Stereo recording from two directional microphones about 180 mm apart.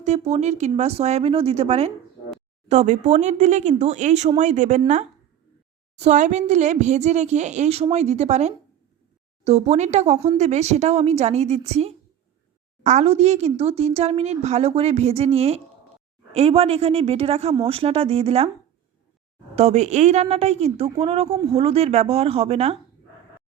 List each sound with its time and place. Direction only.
0.0 s speech: 40° right (ahead or behind)
19.5 s speech: 35° right (ahead or behind)